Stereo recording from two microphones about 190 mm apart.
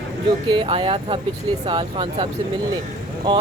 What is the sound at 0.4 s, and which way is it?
Speech, 25° right (ahead or behind).